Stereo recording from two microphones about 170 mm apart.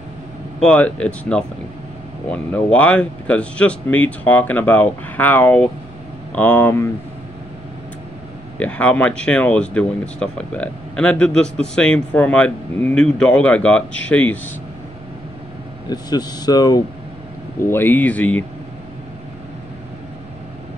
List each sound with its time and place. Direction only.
0.6 s speech: 5° left (ahead or behind)
8.5 s speech: 10° left (ahead or behind)
15.9 s speech: 25° left (ahead or behind)
17.6 s speech: 10° left (ahead or behind)